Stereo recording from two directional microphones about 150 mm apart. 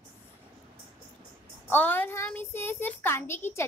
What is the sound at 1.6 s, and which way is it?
A child's voice, 10° left (ahead or behind).